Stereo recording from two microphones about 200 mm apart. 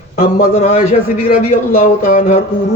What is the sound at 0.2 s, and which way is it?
A man's voice, 40° left (ahead or behind).